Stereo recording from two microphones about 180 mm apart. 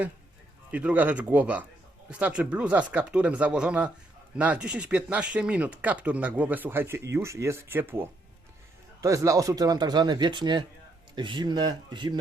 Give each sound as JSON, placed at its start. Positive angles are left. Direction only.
{"t": 0.7, "sound": "speech", "side_deg": -10}